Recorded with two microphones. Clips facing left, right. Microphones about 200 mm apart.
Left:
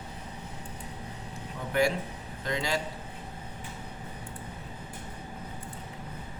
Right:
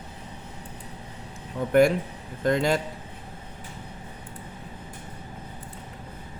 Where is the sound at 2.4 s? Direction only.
50° right (ahead or behind).